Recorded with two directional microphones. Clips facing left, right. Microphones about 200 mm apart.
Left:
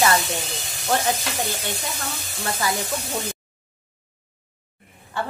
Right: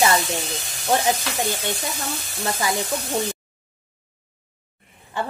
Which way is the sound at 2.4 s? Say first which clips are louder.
Right 1 dB; 15° right (ahead or behind).